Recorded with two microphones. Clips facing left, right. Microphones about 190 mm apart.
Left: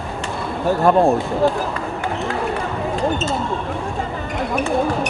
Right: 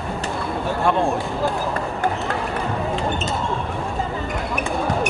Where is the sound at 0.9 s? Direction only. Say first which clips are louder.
Left 6 dB; 40° left (ahead or behind).